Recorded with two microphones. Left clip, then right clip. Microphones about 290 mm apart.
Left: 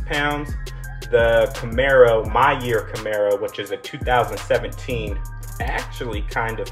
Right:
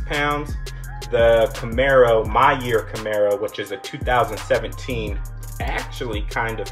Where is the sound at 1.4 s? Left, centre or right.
Centre.